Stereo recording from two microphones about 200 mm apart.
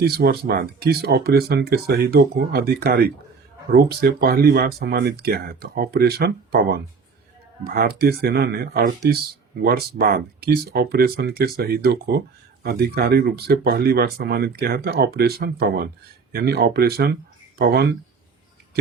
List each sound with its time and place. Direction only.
0.0 s speech: 50° right (ahead or behind)